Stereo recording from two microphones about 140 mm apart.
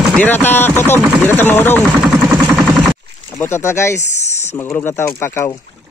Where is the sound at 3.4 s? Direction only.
20° left (ahead or behind).